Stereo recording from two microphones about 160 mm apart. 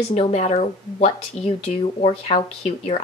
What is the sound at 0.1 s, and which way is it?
A woman's voice, 40° left (ahead or behind).